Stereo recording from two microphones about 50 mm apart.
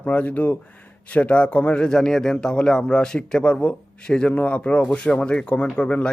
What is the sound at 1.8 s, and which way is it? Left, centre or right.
Speech, centre.